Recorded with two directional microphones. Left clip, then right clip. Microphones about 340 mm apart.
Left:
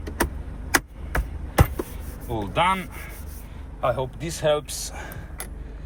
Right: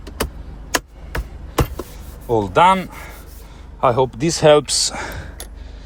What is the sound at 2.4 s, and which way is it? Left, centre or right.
Speech, right.